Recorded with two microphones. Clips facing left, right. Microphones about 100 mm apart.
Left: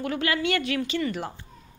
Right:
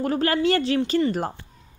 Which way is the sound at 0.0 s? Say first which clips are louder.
Right 5 dB; 40° right (ahead or behind).